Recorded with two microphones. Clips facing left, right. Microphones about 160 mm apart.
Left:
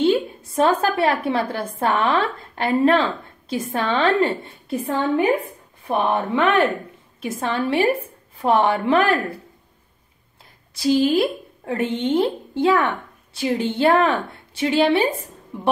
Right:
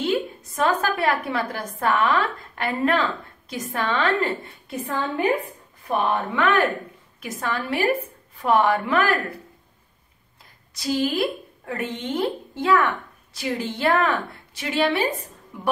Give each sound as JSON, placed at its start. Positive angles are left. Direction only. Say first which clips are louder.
{"t": 0.6, "sound": "a woman's voice", "louder": "left 4 dB", "side_deg": 30}
{"t": 10.7, "sound": "a woman's voice", "louder": "left 6 dB", "side_deg": 25}